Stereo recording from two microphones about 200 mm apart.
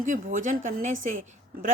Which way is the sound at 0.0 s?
40° right (ahead or behind).